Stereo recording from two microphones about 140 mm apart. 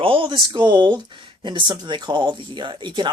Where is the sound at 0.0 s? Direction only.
40° right (ahead or behind).